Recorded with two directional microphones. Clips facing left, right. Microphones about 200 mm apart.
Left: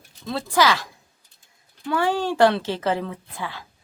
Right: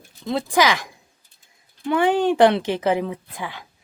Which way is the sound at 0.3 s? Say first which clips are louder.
Right 1 dB; 15° right (ahead or behind).